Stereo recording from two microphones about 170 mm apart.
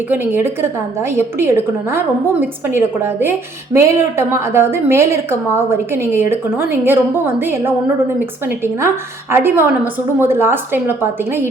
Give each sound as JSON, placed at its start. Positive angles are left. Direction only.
{"t": 0.1, "sound": "a woman's voice", "side_deg": -10}
{"t": 9.3, "sound": "a woman's voice", "side_deg": -10}